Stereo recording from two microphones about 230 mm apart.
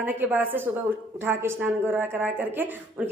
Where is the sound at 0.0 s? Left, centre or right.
Centre.